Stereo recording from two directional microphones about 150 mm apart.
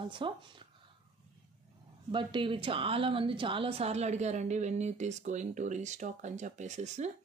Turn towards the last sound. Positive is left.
turn(degrees=-50)  # may be behind; listen again after turning